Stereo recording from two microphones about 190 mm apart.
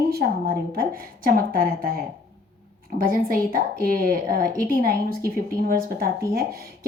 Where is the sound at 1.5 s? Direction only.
50° right (ahead or behind).